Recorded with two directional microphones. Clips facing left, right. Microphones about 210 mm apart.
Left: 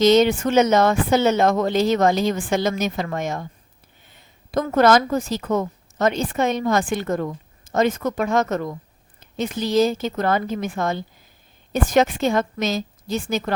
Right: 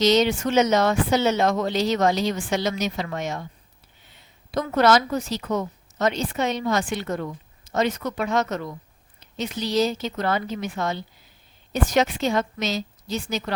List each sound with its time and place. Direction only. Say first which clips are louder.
0.0 s a woman's voice: left 4 dB; 50° left (ahead or behind)